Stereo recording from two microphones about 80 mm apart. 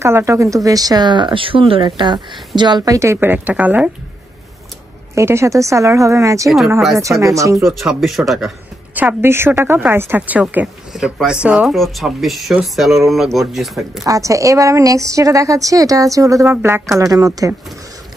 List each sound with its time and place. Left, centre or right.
0.0 s speech: right
2.8 s a woman's voice: right; by 3.9 s centre
5.1 s a woman's voice: right
7.6 s speech: centre
8.9 s a woman's voice: right
11.7 s speech: centre
14.0 s a woman's voice: right
16.4 s a woman's voice: right
17.0 s a woman's voice: right